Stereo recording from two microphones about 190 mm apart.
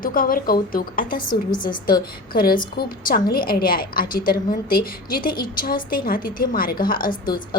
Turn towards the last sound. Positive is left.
turn(degrees=50)  # may be behind; listen again after turning